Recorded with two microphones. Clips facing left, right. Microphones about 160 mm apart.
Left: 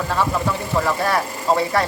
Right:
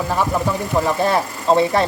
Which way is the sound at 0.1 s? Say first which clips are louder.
Right 1 dB; 15° right (ahead or behind).